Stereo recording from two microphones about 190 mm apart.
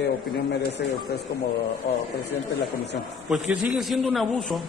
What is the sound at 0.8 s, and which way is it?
Speech, 60° left (ahead or behind).